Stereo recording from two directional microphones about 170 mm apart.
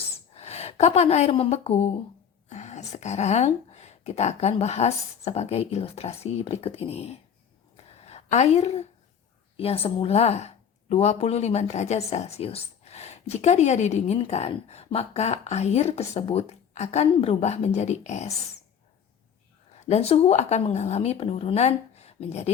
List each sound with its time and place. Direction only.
0.3 s a woman's voice: 40° left (ahead or behind)
19.8 s a woman's voice: 40° left (ahead or behind)